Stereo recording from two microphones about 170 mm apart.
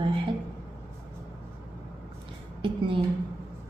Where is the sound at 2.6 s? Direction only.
30° right (ahead or behind).